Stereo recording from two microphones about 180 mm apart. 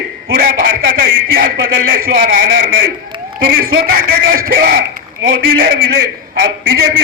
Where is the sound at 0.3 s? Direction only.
55° right (ahead or behind).